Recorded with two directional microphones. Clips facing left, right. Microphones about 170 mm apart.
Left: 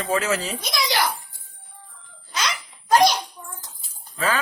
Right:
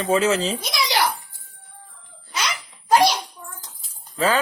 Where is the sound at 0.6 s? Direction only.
15° right (ahead or behind).